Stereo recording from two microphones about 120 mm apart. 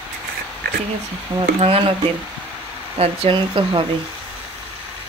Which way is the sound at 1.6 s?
55° right (ahead or behind).